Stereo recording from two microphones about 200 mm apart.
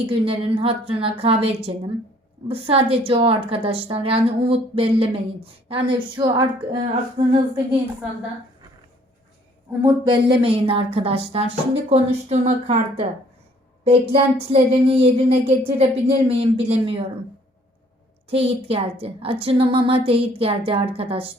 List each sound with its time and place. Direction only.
0.1 s a woman's voice: 25° right (ahead or behind)
9.8 s a woman's voice: 25° right (ahead or behind)
18.3 s a woman's voice: 30° right (ahead or behind)